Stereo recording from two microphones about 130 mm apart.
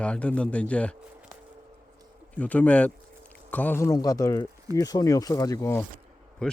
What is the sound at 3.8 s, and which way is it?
Speech, 25° left (ahead or behind).